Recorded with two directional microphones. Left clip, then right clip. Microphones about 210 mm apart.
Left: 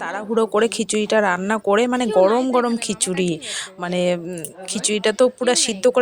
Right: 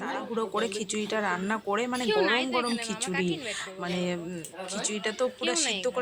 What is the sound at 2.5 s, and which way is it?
Speech, 40° left (ahead or behind).